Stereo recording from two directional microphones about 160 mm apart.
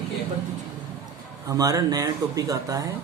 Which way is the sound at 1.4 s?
20° right (ahead or behind).